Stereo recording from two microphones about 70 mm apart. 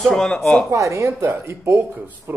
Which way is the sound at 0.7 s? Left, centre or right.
Right.